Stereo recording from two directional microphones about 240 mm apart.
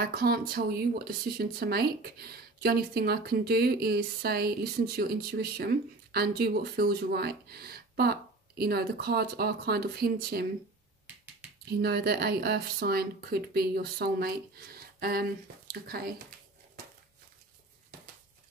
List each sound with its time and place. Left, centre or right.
0.0 s speech: right
11.8 s speech: right